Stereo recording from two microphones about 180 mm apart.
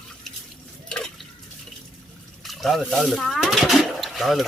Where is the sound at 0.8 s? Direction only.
5° left (ahead or behind).